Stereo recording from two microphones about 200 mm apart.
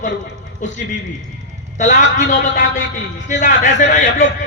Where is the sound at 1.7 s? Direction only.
35° left (ahead or behind).